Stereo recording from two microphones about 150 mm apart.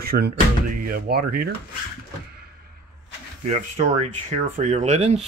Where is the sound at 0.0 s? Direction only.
90° right.